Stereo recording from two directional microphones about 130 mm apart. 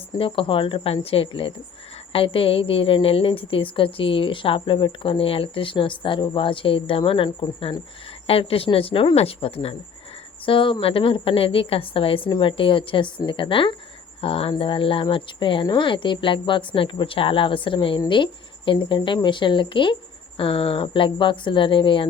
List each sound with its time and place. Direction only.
0.2 s a woman's voice: 40° left (ahead or behind)
8.3 s a woman's voice: 45° left (ahead or behind)